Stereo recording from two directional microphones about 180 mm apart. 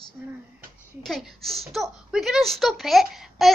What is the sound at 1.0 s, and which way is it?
A woman's voice, centre (ahead or behind).